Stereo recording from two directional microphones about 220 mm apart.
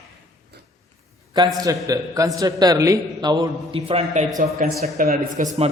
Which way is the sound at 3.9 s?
30° right (ahead or behind).